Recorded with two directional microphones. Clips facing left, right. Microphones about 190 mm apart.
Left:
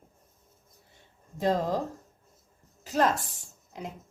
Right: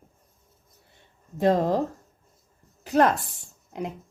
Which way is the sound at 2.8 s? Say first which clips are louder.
Right 5 dB; 60° right (ahead or behind).